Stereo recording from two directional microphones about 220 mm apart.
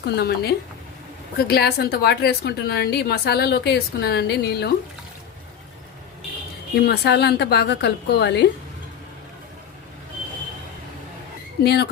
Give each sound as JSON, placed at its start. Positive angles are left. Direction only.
{"t": 0.0, "sound": "a woman's voice", "side_deg": 50}
{"t": 6.7, "sound": "a woman's voice", "side_deg": 50}
{"t": 11.6, "sound": "a woman's voice", "side_deg": 50}